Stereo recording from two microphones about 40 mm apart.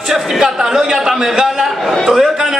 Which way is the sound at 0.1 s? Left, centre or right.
Centre.